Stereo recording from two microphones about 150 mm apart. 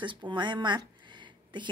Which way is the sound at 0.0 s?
30° right (ahead or behind).